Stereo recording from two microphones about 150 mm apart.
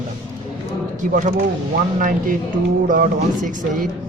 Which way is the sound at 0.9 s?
60° right (ahead or behind).